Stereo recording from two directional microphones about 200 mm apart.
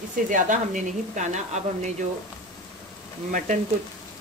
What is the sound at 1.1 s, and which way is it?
Speech, 35° right (ahead or behind).